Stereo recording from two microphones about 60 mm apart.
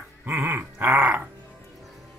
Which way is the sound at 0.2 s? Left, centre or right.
Right.